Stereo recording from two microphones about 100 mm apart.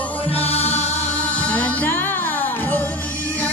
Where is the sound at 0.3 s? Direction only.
85° left.